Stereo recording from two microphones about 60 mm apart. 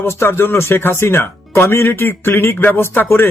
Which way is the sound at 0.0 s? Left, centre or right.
Left.